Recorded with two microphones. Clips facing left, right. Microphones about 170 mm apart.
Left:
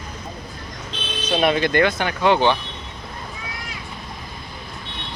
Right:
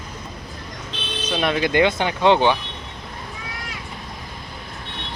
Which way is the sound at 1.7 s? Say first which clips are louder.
Right 1 dB; 20° right (ahead or behind).